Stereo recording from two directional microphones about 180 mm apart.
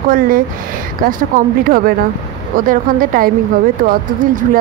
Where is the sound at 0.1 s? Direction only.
50° right (ahead or behind).